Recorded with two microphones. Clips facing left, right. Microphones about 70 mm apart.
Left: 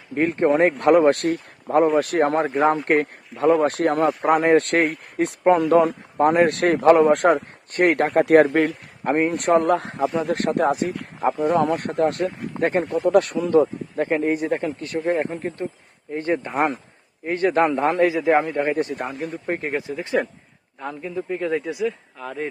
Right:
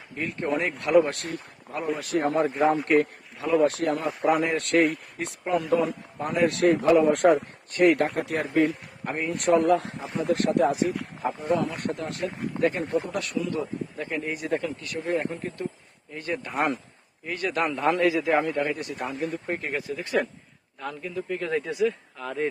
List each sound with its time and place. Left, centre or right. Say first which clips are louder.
0.1 s speech: left 9 dB; left
2.6 s speech: left 2 dB; left
9.0 s speech: left 5 dB; left
11.3 s speech: left 8 dB; left
11.8 s speech: left 8 dB; left
12.8 s speech: left 2 dB; left
13.1 s speech: left 11 dB; left; by 22.4 s centre